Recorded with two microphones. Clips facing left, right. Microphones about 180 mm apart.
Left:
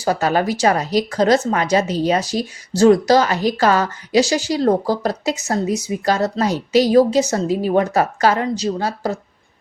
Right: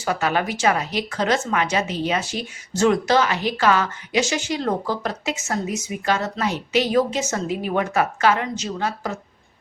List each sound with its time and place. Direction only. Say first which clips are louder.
0.0 s speech: left 5 dB; 40° left (ahead or behind)